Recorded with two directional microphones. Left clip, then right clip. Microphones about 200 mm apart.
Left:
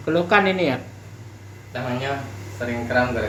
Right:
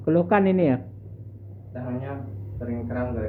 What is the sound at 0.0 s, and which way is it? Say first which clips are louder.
Speech: left 3 dB; 35° right (ahead or behind).